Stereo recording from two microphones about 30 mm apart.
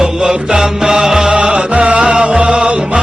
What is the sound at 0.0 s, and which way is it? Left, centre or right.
Music, right.